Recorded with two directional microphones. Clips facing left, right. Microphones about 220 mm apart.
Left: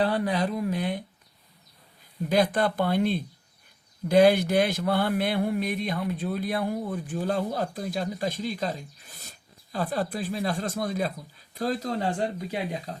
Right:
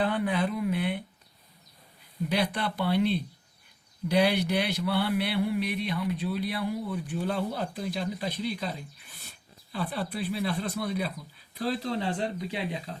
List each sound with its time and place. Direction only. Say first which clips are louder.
0.0 s speech: left 2 dB; 40° left (ahead or behind)
2.3 s mantra: left 6 dB; 45° left (ahead or behind)